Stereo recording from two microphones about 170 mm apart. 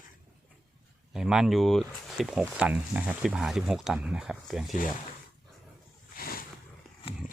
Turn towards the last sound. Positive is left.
turn(degrees=60)  # may be behind; listen again after turning